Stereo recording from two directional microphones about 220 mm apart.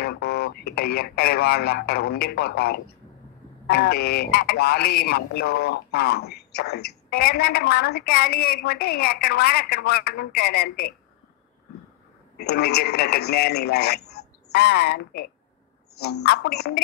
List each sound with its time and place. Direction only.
0.0 s speech: 45° left (ahead or behind)
12.4 s speech: 45° left (ahead or behind)